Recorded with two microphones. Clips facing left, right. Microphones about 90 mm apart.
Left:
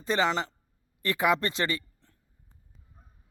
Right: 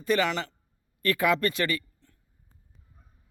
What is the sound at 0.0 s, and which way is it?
A man's voice, 25° left (ahead or behind).